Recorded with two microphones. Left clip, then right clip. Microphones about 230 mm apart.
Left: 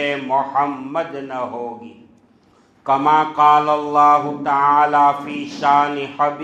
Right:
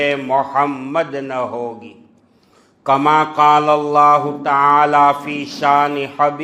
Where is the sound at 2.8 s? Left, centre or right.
Right.